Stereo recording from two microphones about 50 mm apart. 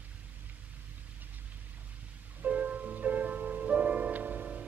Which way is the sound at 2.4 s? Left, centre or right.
Right.